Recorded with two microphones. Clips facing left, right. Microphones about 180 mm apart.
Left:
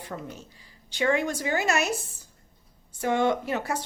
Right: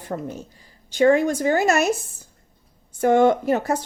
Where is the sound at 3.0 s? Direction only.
50° right (ahead or behind).